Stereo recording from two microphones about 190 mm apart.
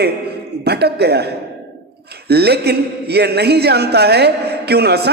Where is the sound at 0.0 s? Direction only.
60° right (ahead or behind).